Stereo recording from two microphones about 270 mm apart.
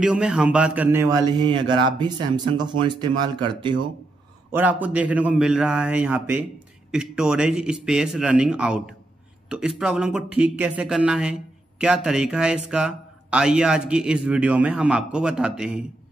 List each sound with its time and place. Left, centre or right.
0.0 s a man's voice: centre
4.5 s a man's voice: centre